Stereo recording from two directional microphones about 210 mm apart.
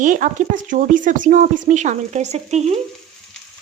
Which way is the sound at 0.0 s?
40° right (ahead or behind).